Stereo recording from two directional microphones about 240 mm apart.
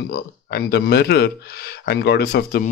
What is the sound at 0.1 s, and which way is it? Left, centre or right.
Speech, left.